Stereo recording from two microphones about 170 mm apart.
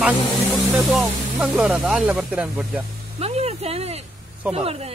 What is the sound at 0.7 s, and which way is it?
Speech, centre (ahead or behind).